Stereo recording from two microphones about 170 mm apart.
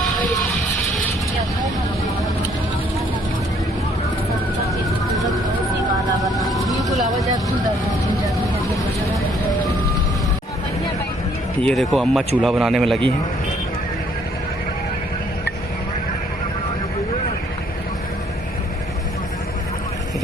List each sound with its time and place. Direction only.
6.3 s vehicle: centre (ahead or behind)
11.6 s speech: centre (ahead or behind)